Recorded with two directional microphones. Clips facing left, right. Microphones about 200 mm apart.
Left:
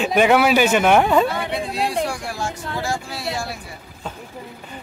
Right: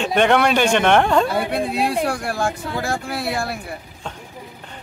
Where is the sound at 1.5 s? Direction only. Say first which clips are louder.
Right 3 dB; 55° right (ahead or behind).